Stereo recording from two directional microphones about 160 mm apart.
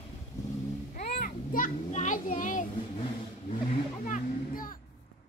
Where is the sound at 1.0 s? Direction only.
65° left (ahead or behind).